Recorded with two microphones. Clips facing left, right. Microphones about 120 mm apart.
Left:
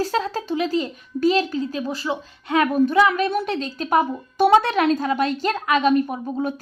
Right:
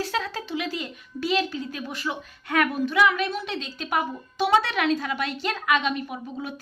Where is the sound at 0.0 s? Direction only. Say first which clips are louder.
Left 6 dB; 40° left (ahead or behind).